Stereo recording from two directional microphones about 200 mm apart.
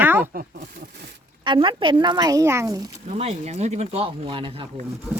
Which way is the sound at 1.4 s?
25° right (ahead or behind).